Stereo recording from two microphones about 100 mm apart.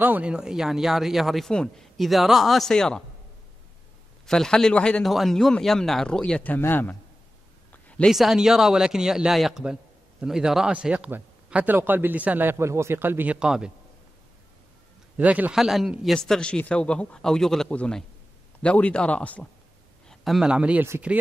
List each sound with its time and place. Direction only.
0.0 s a man's voice: 15° right (ahead or behind); by 3.0 s 5° left (ahead or behind)
4.3 s a man's voice: 5° left (ahead or behind)
7.7 s a sound: 15° left (ahead or behind)
8.1 s a man's voice: 5° right (ahead or behind)
15.1 s a man's voice: 15° right (ahead or behind)
15.5 s a man's voice: 5° right (ahead or behind); by 19.4 s 15° left (ahead or behind)
20.1 s a man's voice: 5° right (ahead or behind)